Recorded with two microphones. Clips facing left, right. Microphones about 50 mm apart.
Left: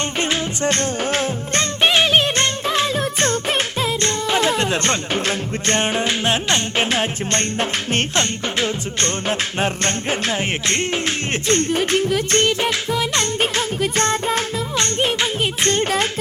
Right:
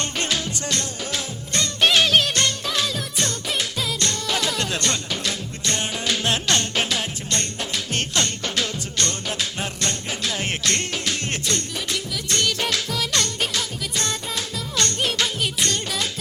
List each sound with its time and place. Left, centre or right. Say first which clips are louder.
0.2 s music: left 6 dB; left
1.8 s music: left 2 dB; left
12.5 s music: left 5 dB; left
13.4 s music: left 7 dB; left
14.8 s music: left 3 dB; left